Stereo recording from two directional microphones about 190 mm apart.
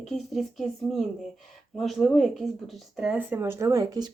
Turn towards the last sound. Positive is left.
turn(degrees=-20)  # may be behind; listen again after turning